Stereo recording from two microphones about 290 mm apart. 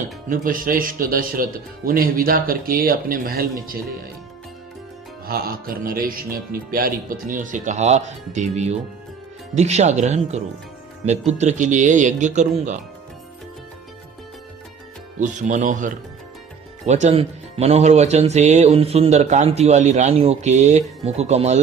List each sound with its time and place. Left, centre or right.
0.3 s speech: right
5.2 s speech: right
15.2 s speech: right